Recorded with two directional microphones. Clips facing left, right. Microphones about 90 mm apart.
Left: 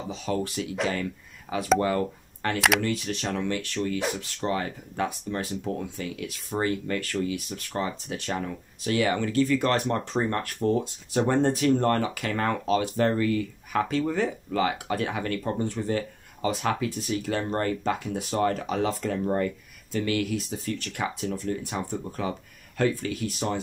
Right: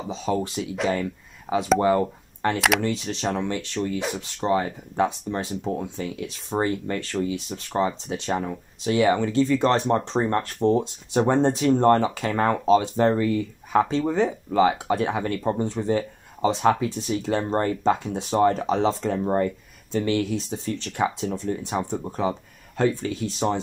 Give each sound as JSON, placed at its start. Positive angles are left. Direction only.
{"t": 0.1, "sound": "speech", "side_deg": -20}
{"t": 1.8, "sound": "speech", "side_deg": -25}